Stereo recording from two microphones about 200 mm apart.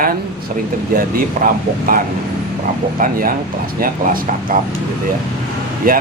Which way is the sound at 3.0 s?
45° right (ahead or behind).